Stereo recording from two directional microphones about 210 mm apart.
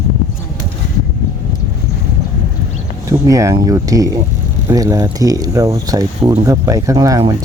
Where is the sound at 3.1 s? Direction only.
15° right (ahead or behind).